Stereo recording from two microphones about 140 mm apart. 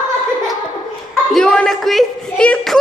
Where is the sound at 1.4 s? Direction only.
5° left (ahead or behind).